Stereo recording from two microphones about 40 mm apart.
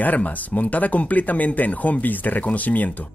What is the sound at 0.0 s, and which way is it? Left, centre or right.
Speech, left.